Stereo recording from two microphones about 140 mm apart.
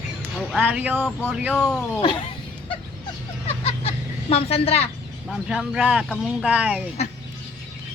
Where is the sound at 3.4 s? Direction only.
45° left (ahead or behind).